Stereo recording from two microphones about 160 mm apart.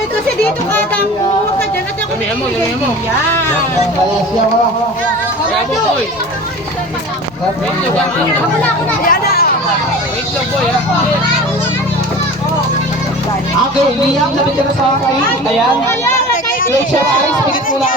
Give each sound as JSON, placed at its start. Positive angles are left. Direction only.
{"t": 9.0, "sound": "speech", "side_deg": 65}